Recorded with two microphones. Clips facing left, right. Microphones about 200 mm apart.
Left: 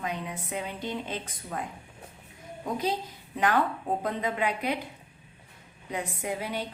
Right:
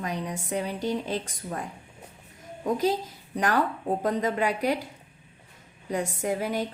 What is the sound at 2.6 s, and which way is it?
A woman's voice, 45° right (ahead or behind).